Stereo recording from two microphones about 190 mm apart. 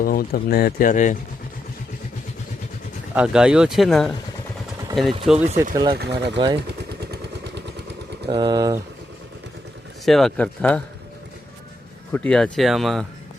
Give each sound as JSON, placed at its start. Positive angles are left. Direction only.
{"t": 0.0, "sound": "speech", "side_deg": 50}
{"t": 3.2, "sound": "speech", "side_deg": -5}
{"t": 5.2, "sound": "speech", "side_deg": -5}
{"t": 5.7, "sound": "speech", "side_deg": -20}
{"t": 6.0, "sound": "speech", "side_deg": -60}
{"t": 6.3, "sound": "speech", "side_deg": -25}
{"t": 6.6, "sound": "vehicle", "side_deg": -60}
{"t": 8.3, "sound": "speech", "side_deg": -20}
{"t": 10.1, "sound": "speech", "side_deg": 0}
{"t": 12.1, "sound": "speech", "side_deg": 5}